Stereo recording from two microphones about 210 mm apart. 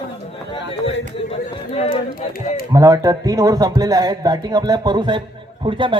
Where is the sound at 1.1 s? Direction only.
30° left (ahead or behind).